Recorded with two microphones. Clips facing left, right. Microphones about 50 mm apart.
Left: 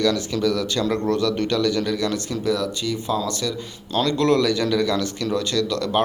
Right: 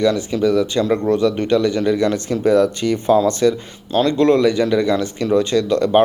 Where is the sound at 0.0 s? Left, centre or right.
Right.